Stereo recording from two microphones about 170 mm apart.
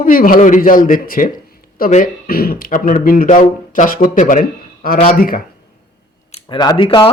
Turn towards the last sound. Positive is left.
turn(degrees=30)  # may be behind; listen again after turning